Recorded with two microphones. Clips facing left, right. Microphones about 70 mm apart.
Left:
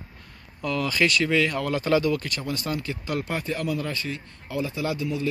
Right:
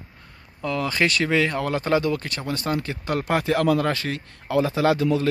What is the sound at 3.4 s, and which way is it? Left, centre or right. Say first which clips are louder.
Speech: right 8 dB; right.